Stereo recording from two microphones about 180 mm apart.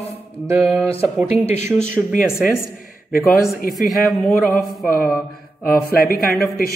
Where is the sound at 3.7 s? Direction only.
Centre (ahead or behind).